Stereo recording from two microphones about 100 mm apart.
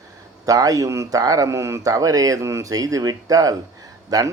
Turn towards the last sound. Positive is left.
turn(degrees=-40)  # may be behind; listen again after turning